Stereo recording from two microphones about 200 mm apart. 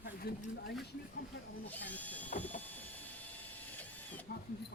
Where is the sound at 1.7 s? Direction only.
10° left (ahead or behind).